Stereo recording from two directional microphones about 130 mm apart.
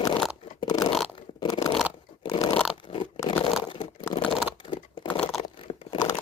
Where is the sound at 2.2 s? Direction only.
30° left (ahead or behind).